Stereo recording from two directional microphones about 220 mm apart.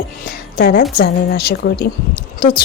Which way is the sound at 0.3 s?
45° left (ahead or behind).